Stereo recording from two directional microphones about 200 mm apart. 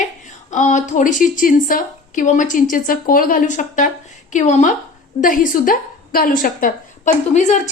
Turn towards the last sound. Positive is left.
turn(degrees=35)  # may be behind; listen again after turning